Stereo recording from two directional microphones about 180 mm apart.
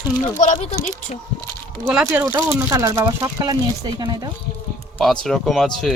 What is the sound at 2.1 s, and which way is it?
Speech, 15° right (ahead or behind).